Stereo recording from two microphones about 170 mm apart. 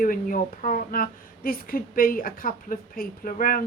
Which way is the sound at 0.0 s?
55° left (ahead or behind).